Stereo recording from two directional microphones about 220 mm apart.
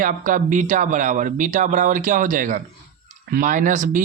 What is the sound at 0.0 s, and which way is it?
Speech, 40° right (ahead or behind).